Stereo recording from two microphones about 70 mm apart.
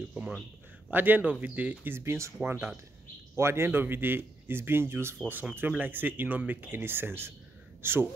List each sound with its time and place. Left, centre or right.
0.8 s speech: right
1.9 s a man's voice: right